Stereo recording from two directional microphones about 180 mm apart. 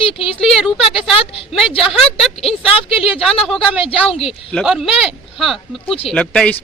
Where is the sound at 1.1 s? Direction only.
30° left (ahead or behind).